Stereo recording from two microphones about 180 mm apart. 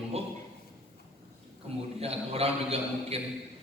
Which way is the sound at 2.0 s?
35° right (ahead or behind).